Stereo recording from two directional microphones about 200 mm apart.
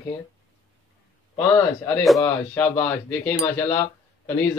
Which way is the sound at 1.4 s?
10° left (ahead or behind).